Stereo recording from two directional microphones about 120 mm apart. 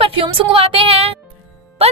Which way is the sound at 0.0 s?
50° right (ahead or behind).